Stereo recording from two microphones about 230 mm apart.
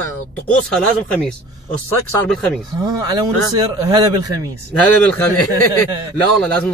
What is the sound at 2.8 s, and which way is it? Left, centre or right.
Speech, centre.